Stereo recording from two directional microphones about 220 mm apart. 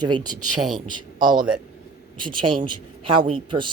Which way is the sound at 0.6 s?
Centre (ahead or behind).